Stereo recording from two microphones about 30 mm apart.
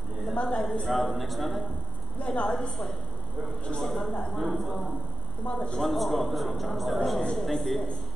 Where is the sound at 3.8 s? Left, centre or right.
Centre.